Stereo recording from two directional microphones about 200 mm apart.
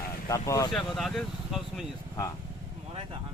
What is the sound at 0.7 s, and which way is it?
Speech, centre (ahead or behind).